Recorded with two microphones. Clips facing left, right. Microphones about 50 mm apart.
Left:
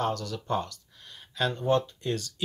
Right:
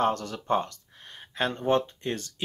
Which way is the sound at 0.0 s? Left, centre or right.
Right.